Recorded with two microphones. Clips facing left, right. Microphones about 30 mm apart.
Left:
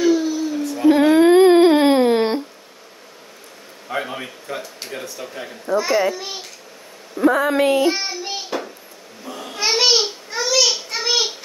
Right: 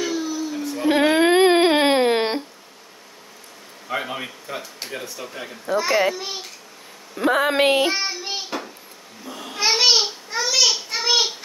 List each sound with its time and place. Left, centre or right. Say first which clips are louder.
0.0 s baby cry: left 7 dB; centre
0.8 s a sound: left 4 dB; right
3.9 s speech: left 1 dB; centre
5.9 s speech: even; right
6.1 s speech: even; centre
7.2 s speech: left 2 dB; right
7.9 s child singing: even; centre
9.2 s a sound: even; centre